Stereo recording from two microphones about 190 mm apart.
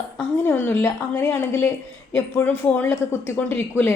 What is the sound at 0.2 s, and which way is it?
Speech, 10° left (ahead or behind).